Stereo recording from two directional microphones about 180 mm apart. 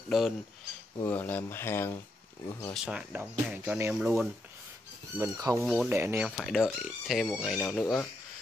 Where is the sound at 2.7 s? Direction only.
5° right (ahead or behind).